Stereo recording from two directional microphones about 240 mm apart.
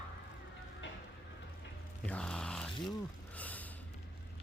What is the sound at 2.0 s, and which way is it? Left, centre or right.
Music, centre.